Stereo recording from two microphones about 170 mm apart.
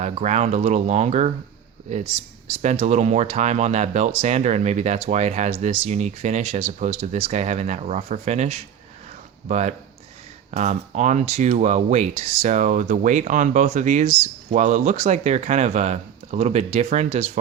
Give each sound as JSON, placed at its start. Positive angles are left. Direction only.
{"t": 0.0, "sound": "speech", "side_deg": -45}